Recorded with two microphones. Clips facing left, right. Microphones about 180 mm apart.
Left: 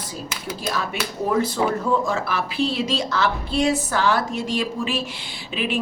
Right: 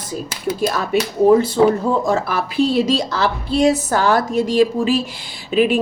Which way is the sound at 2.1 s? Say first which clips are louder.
Right 5 dB; 40° right (ahead or behind).